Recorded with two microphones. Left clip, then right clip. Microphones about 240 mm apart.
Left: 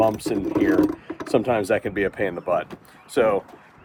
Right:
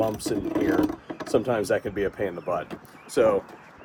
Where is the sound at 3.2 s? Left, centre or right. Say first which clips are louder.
Left 1 dB; left.